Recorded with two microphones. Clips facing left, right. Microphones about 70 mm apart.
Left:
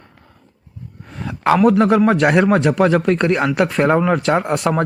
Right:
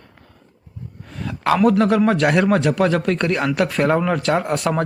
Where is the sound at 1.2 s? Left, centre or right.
Centre.